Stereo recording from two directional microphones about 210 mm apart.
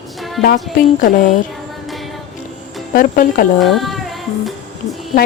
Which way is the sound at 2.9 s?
40° left (ahead or behind).